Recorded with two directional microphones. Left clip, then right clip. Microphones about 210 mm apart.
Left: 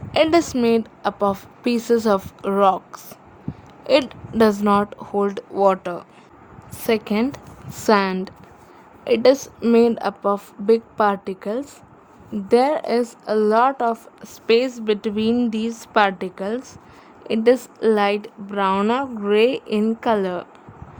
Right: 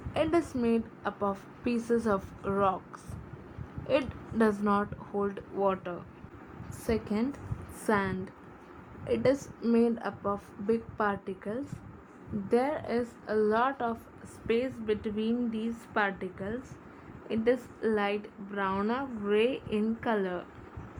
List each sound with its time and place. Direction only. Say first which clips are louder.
0.1 s a woman's voice: left 12 dB; 40° left (ahead or behind)
6.7 s a woman's voice: left 11 dB; 35° left (ahead or behind)
9.6 s a woman's voice: left 12 dB; 40° left (ahead or behind)